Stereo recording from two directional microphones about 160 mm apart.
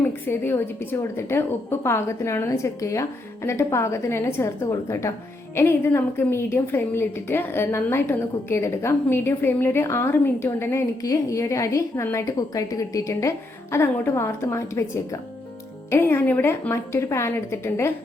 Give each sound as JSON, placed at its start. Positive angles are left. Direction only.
{"t": 0.0, "sound": "a woman's voice", "side_deg": 15}